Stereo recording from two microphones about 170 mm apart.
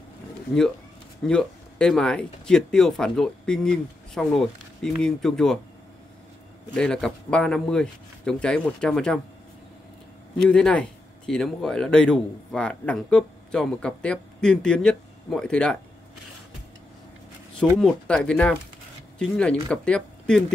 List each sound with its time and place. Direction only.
1.2 s a man's voice: 5° left (ahead or behind)
6.7 s a man's voice: 5° left (ahead or behind)
10.5 s a man's voice: 5° left (ahead or behind)
17.6 s a man's voice: 5° left (ahead or behind)